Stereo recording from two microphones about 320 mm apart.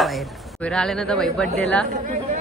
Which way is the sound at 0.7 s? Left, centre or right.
Centre.